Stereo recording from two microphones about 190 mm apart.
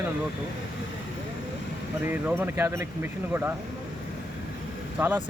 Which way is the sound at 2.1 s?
10° right (ahead or behind).